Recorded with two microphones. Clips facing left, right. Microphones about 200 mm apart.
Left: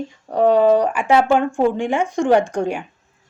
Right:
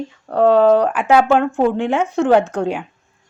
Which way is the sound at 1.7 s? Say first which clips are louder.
Right 2 dB; 10° left (ahead or behind).